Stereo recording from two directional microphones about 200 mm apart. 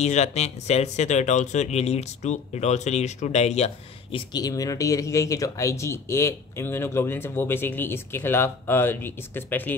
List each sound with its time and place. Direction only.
0.0 s speech: 35° left (ahead or behind)
4.3 s speech: 20° left (ahead or behind)